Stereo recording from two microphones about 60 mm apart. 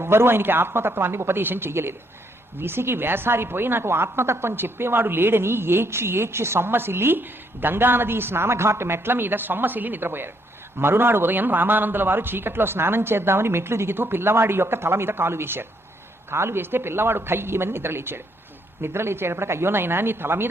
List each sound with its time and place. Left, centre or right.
0.0 s a woman's voice: right